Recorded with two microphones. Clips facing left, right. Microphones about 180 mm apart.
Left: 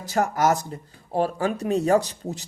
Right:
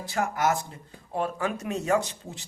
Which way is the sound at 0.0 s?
40° left (ahead or behind).